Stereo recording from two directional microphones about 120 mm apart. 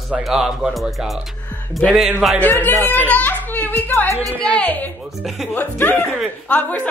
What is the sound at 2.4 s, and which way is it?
A woman's voice, 15° left (ahead or behind).